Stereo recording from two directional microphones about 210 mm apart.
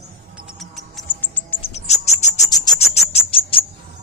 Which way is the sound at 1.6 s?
30° left (ahead or behind).